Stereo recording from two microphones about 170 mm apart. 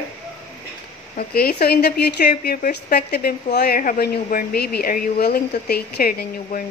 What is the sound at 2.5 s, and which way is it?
A woman's voice, 55° left (ahead or behind).